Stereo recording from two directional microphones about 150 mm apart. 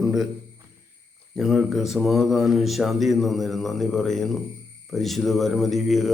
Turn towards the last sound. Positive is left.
turn(degrees=0)  # may be behind; listen again after turning